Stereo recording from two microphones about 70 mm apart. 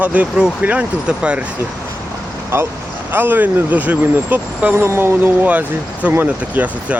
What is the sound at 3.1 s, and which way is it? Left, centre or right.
Speech, right.